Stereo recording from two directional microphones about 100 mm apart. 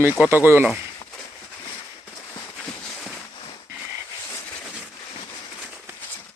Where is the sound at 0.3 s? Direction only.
20° right (ahead or behind).